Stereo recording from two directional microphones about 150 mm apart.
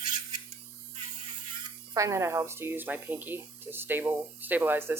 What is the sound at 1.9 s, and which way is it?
Speech, 25° right (ahead or behind).